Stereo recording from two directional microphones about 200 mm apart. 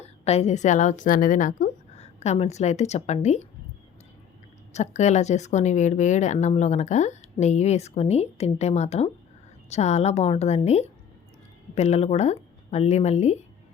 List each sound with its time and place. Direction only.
0.0 s a woman's voice: 30° left (ahead or behind)
4.7 s speech: 35° left (ahead or behind)